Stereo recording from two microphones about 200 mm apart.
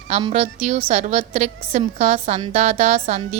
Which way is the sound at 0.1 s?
30° right (ahead or behind).